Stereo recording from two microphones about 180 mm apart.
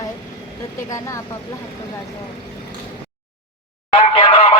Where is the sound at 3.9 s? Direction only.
30° left (ahead or behind).